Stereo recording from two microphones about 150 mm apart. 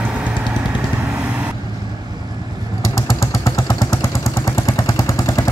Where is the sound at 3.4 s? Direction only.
20° left (ahead or behind).